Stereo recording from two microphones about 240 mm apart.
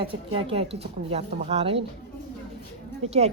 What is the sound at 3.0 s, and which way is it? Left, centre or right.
Speech, right.